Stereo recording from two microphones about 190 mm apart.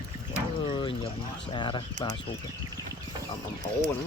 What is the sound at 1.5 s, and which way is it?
Speech, 25° left (ahead or behind).